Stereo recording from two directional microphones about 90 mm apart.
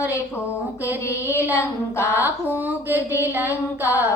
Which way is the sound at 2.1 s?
20° right (ahead or behind).